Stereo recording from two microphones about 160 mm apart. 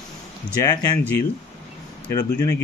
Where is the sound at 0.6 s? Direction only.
15° left (ahead or behind).